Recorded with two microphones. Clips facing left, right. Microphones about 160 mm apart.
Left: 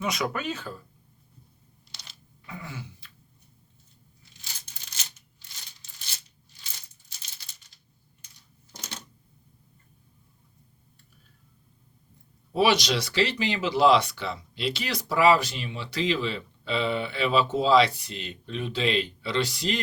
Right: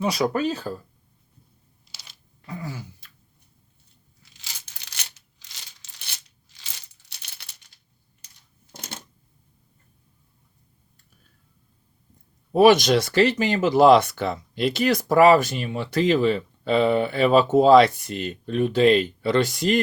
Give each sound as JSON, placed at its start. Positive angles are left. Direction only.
{"t": 0.0, "sound": "speech", "side_deg": -35}
{"t": 1.9, "sound": "camera", "side_deg": -5}
{"t": 2.5, "sound": "a sound", "side_deg": -40}
{"t": 4.2, "sound": "a sound", "side_deg": -90}
{"t": 7.1, "sound": "coin", "side_deg": -65}
{"t": 8.7, "sound": "typewriter", "side_deg": -55}
{"t": 12.5, "sound": "speech", "side_deg": -50}